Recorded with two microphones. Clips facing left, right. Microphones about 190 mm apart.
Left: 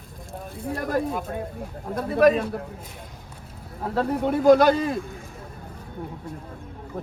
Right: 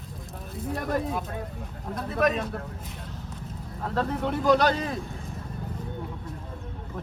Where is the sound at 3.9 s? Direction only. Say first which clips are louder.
Left 4 dB; 10° left (ahead or behind).